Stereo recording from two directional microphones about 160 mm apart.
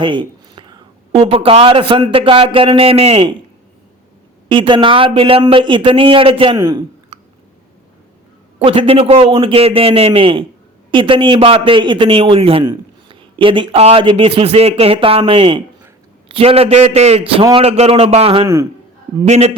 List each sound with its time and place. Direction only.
0.0 s a sound: 30° right (ahead or behind)
1.1 s a man's voice: 40° right (ahead or behind)
4.4 s a man's voice: 30° right (ahead or behind)
6.6 s a sound: 25° right (ahead or behind)
8.5 s a man's voice: 35° right (ahead or behind)
18.4 s a man's voice: 20° right (ahead or behind)
19.3 s a man's voice: 40° right (ahead or behind)